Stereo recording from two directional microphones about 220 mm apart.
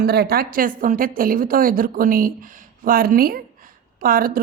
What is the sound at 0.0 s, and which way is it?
A woman's voice, 45° right (ahead or behind).